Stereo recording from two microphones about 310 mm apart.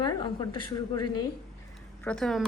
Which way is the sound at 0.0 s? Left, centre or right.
Centre.